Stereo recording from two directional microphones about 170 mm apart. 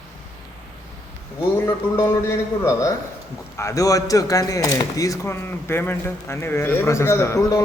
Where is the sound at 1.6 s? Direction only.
15° left (ahead or behind).